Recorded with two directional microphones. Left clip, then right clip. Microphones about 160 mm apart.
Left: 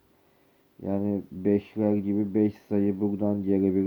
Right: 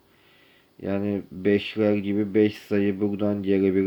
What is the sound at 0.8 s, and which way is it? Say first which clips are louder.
Speech: right 2 dB; 20° right (ahead or behind).